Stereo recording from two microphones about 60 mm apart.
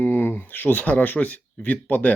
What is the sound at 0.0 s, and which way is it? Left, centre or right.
Speech, left.